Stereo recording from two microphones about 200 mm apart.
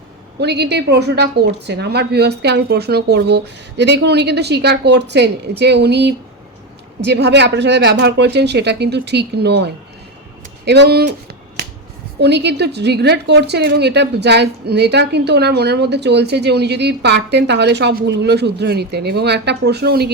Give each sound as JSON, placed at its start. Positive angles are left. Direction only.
{"t": 0.3, "sound": "speech", "side_deg": -55}
{"t": 12.2, "sound": "speech", "side_deg": -55}